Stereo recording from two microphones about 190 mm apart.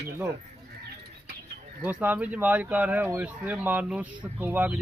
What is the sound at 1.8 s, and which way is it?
Speech, 10° right (ahead or behind).